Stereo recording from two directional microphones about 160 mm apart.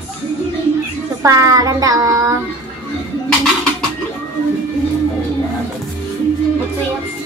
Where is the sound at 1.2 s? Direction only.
20° right (ahead or behind).